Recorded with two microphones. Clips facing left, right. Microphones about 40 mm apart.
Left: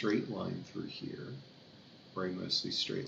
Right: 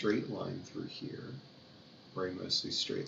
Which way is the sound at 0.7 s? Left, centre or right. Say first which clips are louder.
Right 1 dB; left.